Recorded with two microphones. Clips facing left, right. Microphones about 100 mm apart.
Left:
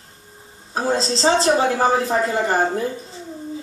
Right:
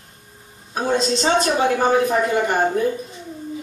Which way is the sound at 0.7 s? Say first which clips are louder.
Right 1 dB; 30° left (ahead or behind).